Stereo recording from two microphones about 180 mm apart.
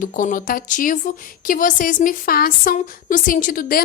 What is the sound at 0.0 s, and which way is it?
A woman's voice, 45° left (ahead or behind).